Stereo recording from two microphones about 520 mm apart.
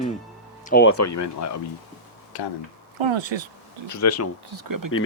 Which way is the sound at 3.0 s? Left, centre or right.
Right.